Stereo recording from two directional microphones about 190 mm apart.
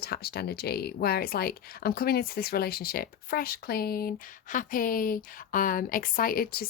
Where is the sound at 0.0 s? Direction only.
55° left (ahead or behind).